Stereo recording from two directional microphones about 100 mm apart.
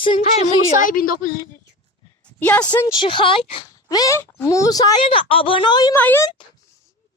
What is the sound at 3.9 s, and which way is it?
Speech, 40° left (ahead or behind).